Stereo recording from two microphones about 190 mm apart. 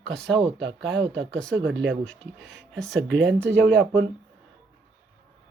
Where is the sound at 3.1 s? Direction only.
70° right (ahead or behind).